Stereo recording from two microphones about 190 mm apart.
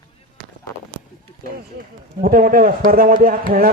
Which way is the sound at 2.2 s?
45° right (ahead or behind).